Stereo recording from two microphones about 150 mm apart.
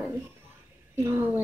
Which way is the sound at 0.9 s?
15° right (ahead or behind).